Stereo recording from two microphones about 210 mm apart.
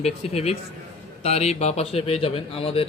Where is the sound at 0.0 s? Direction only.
30° left (ahead or behind).